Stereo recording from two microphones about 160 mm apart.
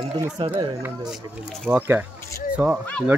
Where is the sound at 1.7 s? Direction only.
10° right (ahead or behind).